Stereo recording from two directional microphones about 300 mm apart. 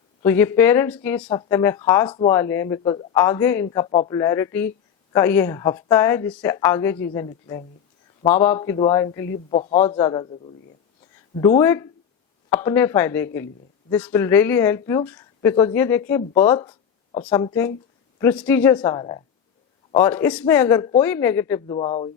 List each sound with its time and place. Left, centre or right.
0.2 s speech: centre
9.5 s a man's voice: left